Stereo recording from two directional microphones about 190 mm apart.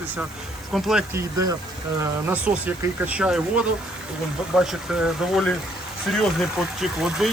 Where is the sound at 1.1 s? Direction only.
20° right (ahead or behind).